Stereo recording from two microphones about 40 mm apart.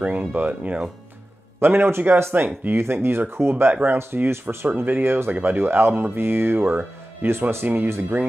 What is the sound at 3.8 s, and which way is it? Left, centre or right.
Speech, right.